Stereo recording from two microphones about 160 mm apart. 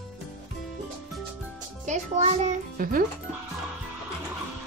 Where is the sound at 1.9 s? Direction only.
45° right (ahead or behind); by 3.0 s 65° right (ahead or behind).